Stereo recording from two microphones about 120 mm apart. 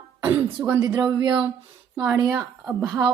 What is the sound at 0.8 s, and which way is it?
A woman's voice, 30° right (ahead or behind).